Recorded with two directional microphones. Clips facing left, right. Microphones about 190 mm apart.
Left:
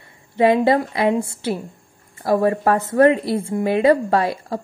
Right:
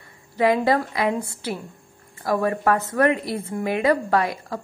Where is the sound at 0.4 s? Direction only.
25° left (ahead or behind).